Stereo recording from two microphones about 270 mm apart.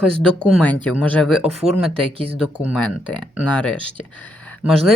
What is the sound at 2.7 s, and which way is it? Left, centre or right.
Speech, centre.